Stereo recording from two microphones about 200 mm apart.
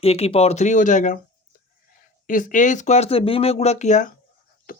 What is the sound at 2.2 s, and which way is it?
Speech, 40° left (ahead or behind).